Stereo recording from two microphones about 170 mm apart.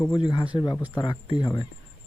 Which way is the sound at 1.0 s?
25° left (ahead or behind).